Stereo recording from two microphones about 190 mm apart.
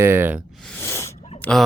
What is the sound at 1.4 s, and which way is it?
Speech, 5° left (ahead or behind).